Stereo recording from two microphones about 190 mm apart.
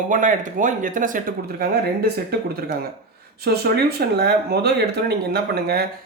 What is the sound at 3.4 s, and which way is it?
Speech, 55° right (ahead or behind).